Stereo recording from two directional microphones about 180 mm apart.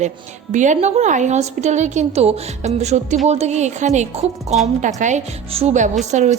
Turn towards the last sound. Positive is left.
turn(degrees=-40)  # may be behind; listen again after turning